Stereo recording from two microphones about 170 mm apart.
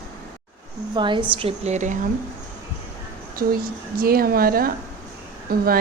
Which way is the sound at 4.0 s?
60° right (ahead or behind).